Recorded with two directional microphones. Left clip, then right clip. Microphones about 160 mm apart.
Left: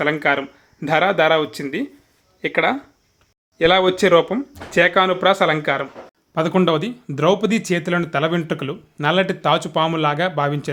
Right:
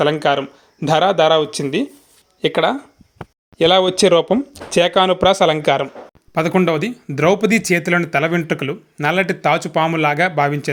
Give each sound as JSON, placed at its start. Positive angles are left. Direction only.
{"t": 0.0, "sound": "speech", "side_deg": -25}
{"t": 6.3, "sound": "speech", "side_deg": -20}